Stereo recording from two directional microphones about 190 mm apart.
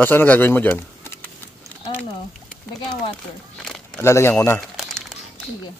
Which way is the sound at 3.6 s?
Centre (ahead or behind).